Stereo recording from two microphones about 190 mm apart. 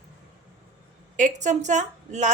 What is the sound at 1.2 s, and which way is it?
Speech, 40° right (ahead or behind).